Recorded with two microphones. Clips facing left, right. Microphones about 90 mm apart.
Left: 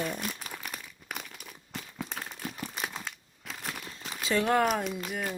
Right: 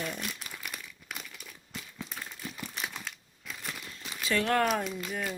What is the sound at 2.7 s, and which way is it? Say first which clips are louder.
Crushing: left 2 dB; 35° left (ahead or behind).